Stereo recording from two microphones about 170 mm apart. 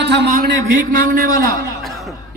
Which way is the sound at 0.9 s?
55° right (ahead or behind).